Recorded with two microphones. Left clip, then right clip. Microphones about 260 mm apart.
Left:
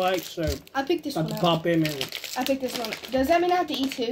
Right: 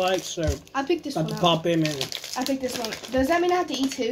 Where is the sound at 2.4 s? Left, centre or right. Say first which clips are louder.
Left 1 dB; centre.